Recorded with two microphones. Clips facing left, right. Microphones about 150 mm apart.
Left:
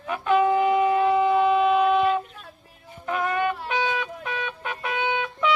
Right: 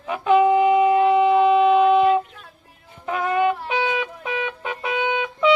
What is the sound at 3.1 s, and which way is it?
Wind instrument, 20° right (ahead or behind).